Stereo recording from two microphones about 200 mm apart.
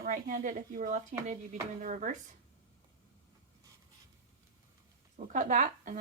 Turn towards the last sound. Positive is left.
turn(degrees=-40)  # may be behind; listen again after turning